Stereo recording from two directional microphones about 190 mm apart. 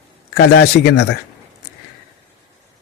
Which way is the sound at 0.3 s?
55° left (ahead or behind).